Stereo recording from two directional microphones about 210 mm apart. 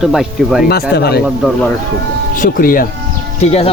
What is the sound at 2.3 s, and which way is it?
Speech, 40° left (ahead or behind).